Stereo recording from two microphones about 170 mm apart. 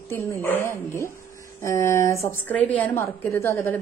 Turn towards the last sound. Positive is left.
turn(degrees=15)  # may be behind; listen again after turning